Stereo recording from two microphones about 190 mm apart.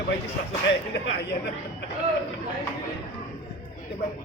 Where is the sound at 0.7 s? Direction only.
65° left (ahead or behind).